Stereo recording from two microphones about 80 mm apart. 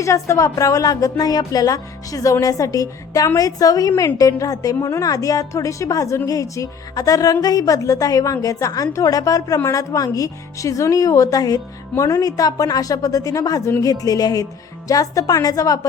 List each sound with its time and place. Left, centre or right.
0.0 s a woman's voice: left